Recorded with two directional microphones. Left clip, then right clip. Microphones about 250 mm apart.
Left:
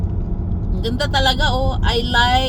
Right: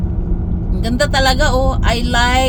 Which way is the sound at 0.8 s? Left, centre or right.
Right.